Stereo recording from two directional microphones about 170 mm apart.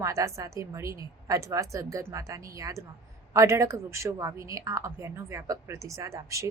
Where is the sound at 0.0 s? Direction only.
20° right (ahead or behind).